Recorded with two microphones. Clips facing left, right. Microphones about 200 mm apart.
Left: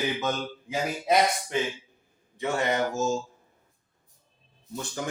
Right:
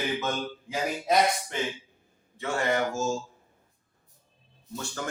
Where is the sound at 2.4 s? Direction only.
20° left (ahead or behind).